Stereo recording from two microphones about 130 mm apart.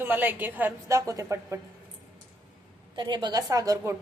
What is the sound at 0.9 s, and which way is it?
Speech, 25° right (ahead or behind).